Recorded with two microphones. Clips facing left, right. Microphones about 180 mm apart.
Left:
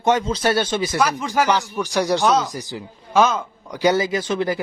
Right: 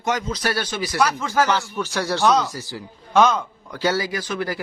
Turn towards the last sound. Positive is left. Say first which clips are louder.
# left 5 dB
turn(degrees=25)  # may be behind; listen again after turning